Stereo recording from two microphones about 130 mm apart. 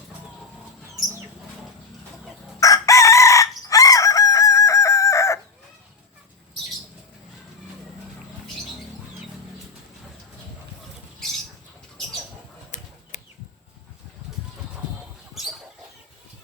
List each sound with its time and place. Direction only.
2.6 s chicken: 25° left (ahead or behind)
12.7 s a sound: 65° left (ahead or behind)
15.4 s chicken: centre (ahead or behind)